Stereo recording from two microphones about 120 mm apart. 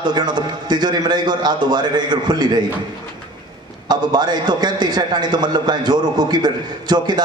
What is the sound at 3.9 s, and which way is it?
A man's voice, 35° right (ahead or behind).